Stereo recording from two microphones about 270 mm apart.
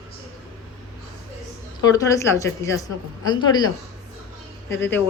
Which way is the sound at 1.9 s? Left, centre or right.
Centre.